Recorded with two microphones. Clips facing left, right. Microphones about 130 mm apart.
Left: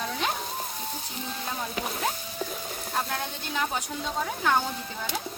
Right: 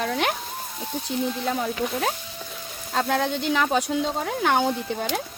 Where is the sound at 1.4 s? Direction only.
80° right.